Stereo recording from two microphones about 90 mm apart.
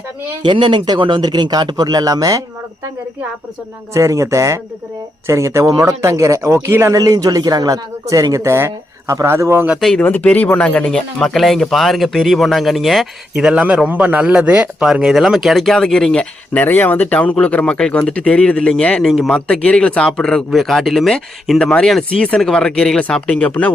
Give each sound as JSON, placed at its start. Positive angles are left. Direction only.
{"t": 0.4, "sound": "speech", "side_deg": -65}
{"t": 3.9, "sound": "speech", "side_deg": -35}
{"t": 10.0, "sound": "speech", "side_deg": 20}
{"t": 13.3, "sound": "a man's voice", "side_deg": -10}
{"t": 16.6, "sound": "speech", "side_deg": 20}